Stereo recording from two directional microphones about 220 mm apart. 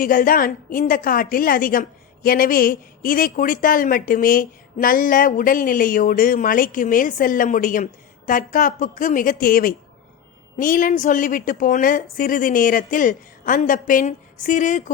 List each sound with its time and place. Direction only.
0.0 s a woman's voice: 40° left (ahead or behind)